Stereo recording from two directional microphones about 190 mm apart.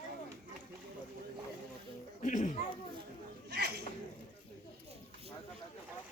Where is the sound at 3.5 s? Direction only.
60° right (ahead or behind).